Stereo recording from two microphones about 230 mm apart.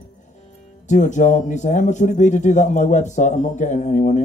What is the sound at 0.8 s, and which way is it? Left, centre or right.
Speech, left.